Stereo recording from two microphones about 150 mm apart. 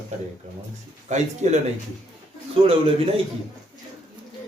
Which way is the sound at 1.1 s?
50° right (ahead or behind).